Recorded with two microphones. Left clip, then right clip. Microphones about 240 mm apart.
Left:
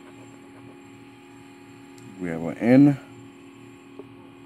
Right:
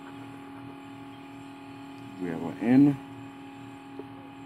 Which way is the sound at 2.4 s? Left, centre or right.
Left.